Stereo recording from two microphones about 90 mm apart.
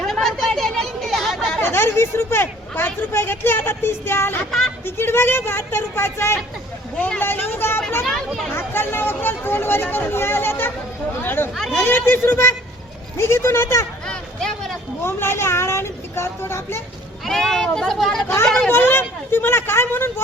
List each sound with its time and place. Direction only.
0.0 s a sound: 5° left (ahead or behind)
1.6 s speech: 25° left (ahead or behind)
14.1 s a sound: 5° left (ahead or behind)
15.0 s speech: 25° left (ahead or behind)
17.2 s speech: centre (ahead or behind)
18.7 s speech: 25° left (ahead or behind)